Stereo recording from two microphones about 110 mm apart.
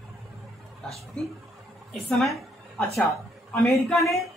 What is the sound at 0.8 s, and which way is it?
A woman's voice, 5° left (ahead or behind).